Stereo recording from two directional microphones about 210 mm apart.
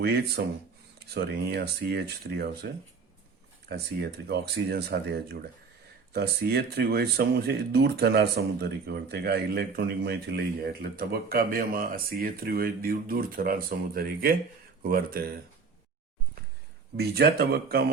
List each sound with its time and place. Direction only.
0.0 s speech: 50° right (ahead or behind)
3.7 s speech: 50° right (ahead or behind)
17.0 s speech: 50° right (ahead or behind)